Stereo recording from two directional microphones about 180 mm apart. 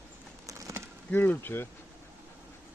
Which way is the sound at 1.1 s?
10° left (ahead or behind).